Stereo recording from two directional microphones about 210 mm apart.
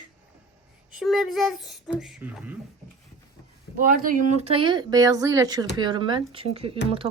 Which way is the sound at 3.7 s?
40° right (ahead or behind).